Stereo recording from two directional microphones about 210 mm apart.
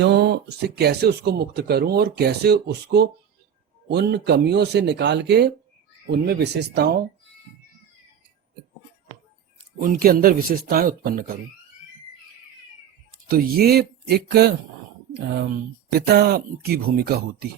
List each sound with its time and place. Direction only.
0.0 s speech: 55° right (ahead or behind)
9.8 s speech: 45° right (ahead or behind)
13.2 s speech: 45° right (ahead or behind)